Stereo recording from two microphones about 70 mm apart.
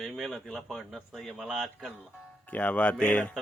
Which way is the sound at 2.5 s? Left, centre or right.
Left.